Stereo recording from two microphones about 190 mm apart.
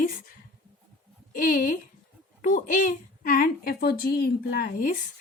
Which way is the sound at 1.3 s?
45° left (ahead or behind).